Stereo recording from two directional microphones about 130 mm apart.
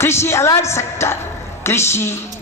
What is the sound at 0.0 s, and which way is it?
A man's voice, 20° left (ahead or behind).